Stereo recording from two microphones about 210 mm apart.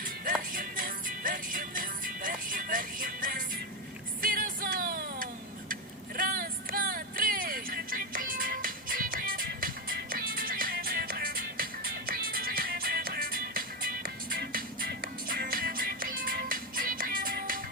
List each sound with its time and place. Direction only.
0.5 s music: 40° right (ahead or behind)